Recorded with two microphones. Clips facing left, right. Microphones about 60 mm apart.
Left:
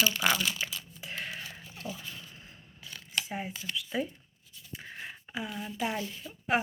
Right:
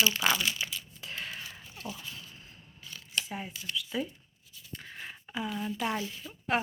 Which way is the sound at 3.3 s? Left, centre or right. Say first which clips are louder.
Left 2 dB; left.